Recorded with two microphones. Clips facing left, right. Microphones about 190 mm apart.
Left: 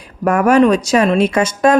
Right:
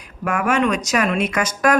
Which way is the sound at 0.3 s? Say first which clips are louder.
Left 8 dB; 40° left (ahead or behind).